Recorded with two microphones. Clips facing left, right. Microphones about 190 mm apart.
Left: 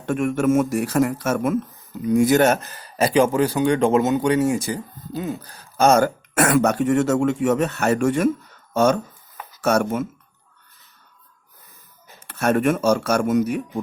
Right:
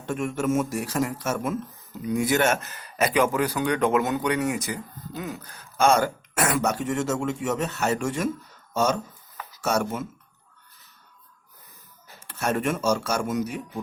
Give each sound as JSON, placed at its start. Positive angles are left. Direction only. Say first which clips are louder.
{"t": 0.0, "sound": "speech", "louder": "left 6 dB", "side_deg": 60}
{"t": 2.0, "sound": "speech", "louder": "left 7 dB", "side_deg": 45}
{"t": 12.3, "sound": "speech", "louder": "left 7 dB", "side_deg": 55}